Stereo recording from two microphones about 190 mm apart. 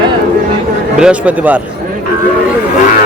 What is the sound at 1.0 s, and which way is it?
Speech, 5° right (ahead or behind).